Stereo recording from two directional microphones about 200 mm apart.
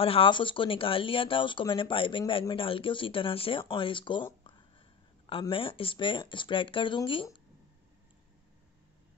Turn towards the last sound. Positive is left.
turn(degrees=25)  # may be behind; listen again after turning